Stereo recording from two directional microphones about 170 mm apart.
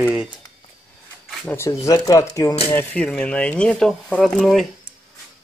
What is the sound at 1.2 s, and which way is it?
Speech, 10° left (ahead or behind).